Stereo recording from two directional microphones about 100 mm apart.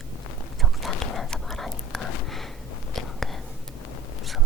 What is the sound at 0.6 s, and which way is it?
Whispering, centre (ahead or behind).